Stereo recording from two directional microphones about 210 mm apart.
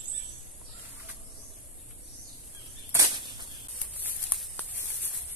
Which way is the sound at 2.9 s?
20° right (ahead or behind).